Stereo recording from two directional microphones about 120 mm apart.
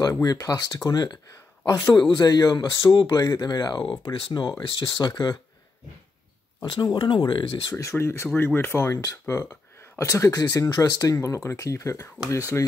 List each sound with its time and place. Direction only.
0.0 s speech: 30° left (ahead or behind)
6.6 s speech: 35° left (ahead or behind)
7.7 s speech: 20° left (ahead or behind)
9.2 s a sound: 15° left (ahead or behind)
10.0 s speech: 30° left (ahead or behind)